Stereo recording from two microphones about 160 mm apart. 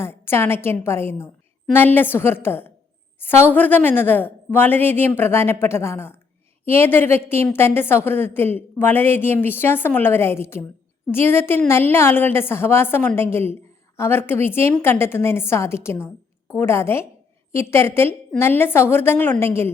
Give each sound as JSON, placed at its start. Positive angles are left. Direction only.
{"t": 0.0, "sound": "a woman's voice", "side_deg": 15}